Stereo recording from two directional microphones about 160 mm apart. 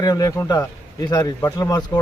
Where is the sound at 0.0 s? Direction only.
25° left (ahead or behind).